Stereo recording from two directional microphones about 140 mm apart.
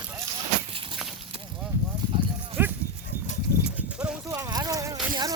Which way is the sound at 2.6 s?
15° right (ahead or behind).